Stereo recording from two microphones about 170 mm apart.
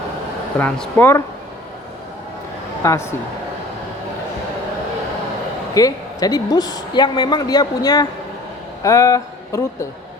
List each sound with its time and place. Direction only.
0.6 s speech: 10° left (ahead or behind)
2.8 s speech: 15° left (ahead or behind)
5.7 s speech: 20° left (ahead or behind)